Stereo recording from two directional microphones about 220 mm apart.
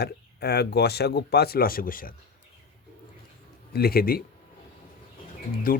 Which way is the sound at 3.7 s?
45° left (ahead or behind).